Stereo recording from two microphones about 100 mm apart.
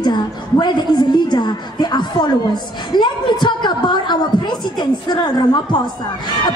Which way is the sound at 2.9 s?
50° left (ahead or behind).